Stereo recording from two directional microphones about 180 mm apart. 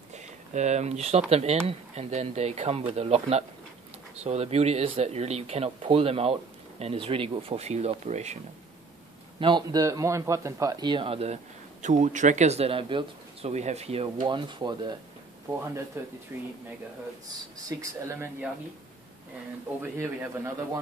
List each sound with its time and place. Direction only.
0.1 s a sound: 40° right (ahead or behind)
1.3 s speech: 35° right (ahead or behind)
9.4 s speech: 25° right (ahead or behind)
16.0 s speech: 15° right (ahead or behind)
17.6 s speech: 15° right (ahead or behind)
19.8 s speech: 15° right (ahead or behind)